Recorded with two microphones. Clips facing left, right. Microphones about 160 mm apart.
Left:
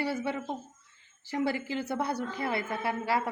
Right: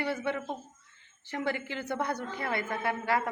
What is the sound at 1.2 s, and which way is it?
A man's voice, 35° left (ahead or behind).